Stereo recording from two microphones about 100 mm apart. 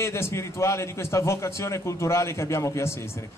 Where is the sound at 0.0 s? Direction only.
25° left (ahead or behind).